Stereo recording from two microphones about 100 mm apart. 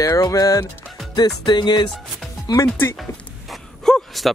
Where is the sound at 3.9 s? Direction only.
Centre (ahead or behind).